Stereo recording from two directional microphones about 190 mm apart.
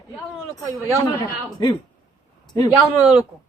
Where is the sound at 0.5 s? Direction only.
20° left (ahead or behind).